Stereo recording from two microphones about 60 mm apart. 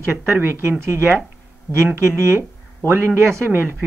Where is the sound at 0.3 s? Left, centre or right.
Right.